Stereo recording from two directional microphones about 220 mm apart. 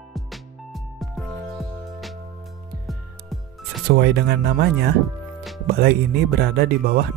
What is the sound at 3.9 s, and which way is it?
Speech, 50° right (ahead or behind).